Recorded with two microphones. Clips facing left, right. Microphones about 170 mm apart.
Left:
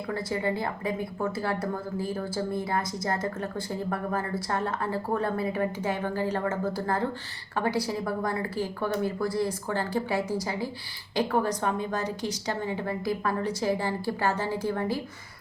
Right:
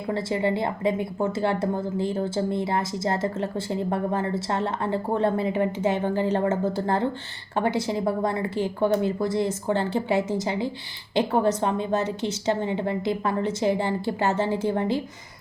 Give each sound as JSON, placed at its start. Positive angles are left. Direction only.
{"t": 0.1, "sound": "a woman's voice", "side_deg": -25}